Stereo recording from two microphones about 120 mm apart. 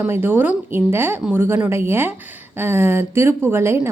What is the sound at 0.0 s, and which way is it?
A woman's voice, 15° right (ahead or behind).